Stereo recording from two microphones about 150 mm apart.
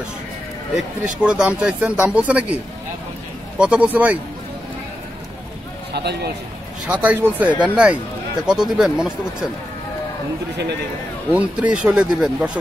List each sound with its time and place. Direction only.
1.0 s speech: 5° right (ahead or behind)
5.9 s a man's voice: 90° right
6.9 s speech: 10° right (ahead or behind)
11.3 s speech: 10° right (ahead or behind)